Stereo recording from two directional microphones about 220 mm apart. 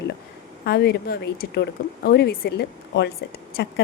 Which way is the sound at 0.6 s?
45° left (ahead or behind).